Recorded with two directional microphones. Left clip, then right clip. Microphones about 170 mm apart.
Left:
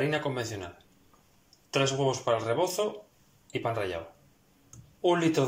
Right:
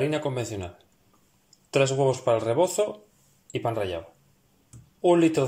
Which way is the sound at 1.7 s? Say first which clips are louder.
Right 5 dB; 20° right (ahead or behind).